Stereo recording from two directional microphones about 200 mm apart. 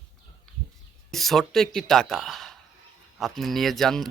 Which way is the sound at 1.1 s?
Centre (ahead or behind).